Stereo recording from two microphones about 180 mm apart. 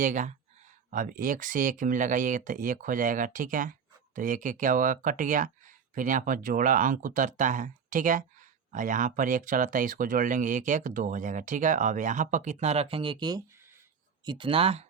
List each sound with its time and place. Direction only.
0.0 s speech: 45° right (ahead or behind)